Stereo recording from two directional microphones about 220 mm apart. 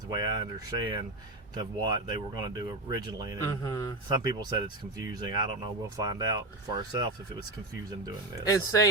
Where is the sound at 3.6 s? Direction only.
15° left (ahead or behind).